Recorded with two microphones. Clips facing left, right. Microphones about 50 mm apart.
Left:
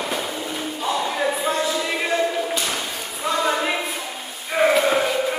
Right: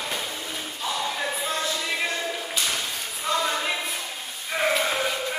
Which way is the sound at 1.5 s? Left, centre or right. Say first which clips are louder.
Left 5 dB; centre.